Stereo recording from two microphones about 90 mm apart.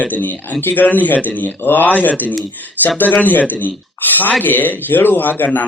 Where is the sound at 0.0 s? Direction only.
20° left (ahead or behind).